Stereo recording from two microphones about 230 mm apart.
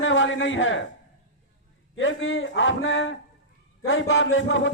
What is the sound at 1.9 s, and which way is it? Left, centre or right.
Speech, left.